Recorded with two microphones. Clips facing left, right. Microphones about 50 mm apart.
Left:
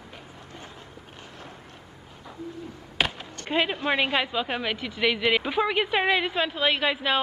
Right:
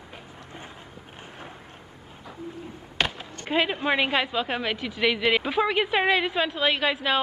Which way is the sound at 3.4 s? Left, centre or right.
Centre.